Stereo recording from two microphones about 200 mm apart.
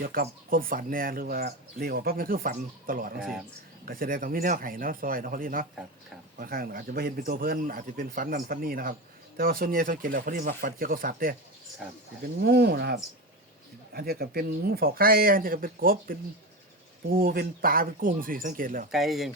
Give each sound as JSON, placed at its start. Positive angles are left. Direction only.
{"t": 0.0, "sound": "speech", "side_deg": -45}
{"t": 12.4, "sound": "speech", "side_deg": -55}
{"t": 18.9, "sound": "speech", "side_deg": 0}